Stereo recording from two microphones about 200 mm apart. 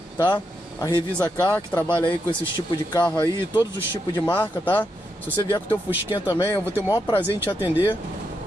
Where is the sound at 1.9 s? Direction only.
25° left (ahead or behind).